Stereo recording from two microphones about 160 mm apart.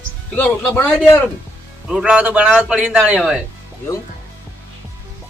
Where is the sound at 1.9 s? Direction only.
5° right (ahead or behind).